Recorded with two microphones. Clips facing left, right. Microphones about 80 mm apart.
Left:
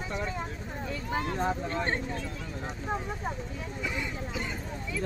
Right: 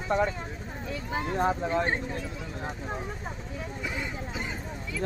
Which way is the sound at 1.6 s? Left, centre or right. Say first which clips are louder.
Right 4 dB; centre.